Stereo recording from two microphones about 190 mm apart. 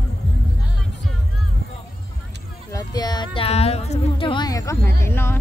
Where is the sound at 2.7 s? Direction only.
20° left (ahead or behind).